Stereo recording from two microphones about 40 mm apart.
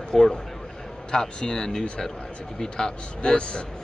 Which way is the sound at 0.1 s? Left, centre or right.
Centre.